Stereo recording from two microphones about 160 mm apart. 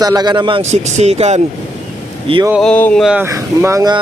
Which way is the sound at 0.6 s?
45° right (ahead or behind).